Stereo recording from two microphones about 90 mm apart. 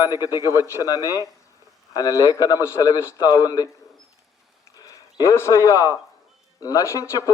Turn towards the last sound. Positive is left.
turn(degrees=35)  # may be behind; listen again after turning